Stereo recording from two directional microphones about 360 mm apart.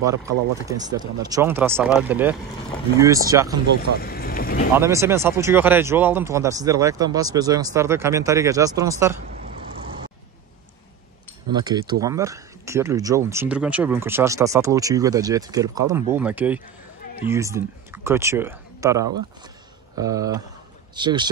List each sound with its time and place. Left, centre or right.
0.0 s speech: centre
3.9 s speech: left
4.7 s speech: centre
11.5 s speech: centre